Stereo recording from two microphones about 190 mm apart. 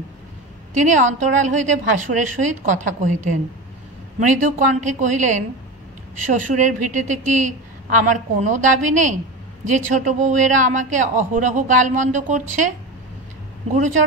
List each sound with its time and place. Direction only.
0.7 s a man's voice: 40° right (ahead or behind)